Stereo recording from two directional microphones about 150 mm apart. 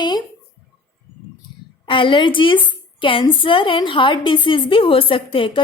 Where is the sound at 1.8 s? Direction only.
35° left (ahead or behind).